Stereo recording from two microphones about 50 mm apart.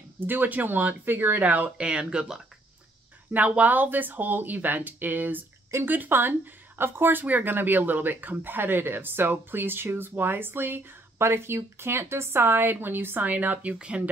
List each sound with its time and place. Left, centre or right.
0.2 s speech: right
1.8 s speech: centre
3.3 s speech: right
11.2 s speech: right
13.7 s speech: right